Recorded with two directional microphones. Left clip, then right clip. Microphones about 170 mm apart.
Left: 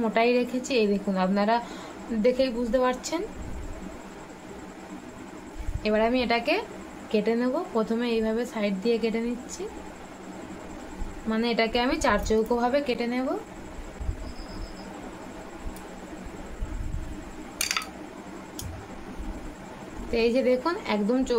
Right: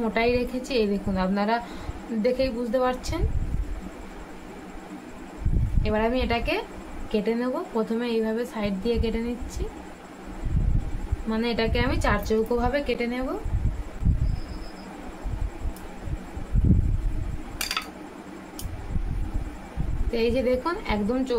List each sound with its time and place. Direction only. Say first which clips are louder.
0.0 s a woman's voice: left 1 dB; 15° left (ahead or behind)
5.8 s a woman's voice: left 1 dB; 20° left (ahead or behind)
11.2 s a woman's voice: left 1 dB; 15° left (ahead or behind)
20.1 s a woman's voice: left 1 dB; 20° left (ahead or behind)